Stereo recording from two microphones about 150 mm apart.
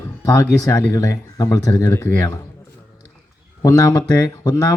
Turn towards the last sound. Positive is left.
turn(degrees=20)  # may be behind; listen again after turning